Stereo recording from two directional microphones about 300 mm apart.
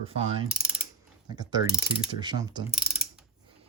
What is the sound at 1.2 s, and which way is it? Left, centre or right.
Pulleys, centre.